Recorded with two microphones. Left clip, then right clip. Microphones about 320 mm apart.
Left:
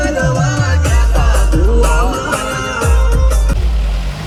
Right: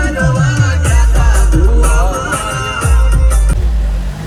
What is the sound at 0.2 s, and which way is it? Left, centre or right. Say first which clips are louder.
Music: even; centre.